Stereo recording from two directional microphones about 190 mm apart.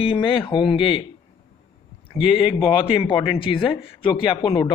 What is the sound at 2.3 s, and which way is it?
A man's voice, 30° left (ahead or behind).